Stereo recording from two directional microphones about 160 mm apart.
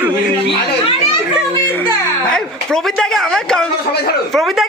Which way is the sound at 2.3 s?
5° left (ahead or behind).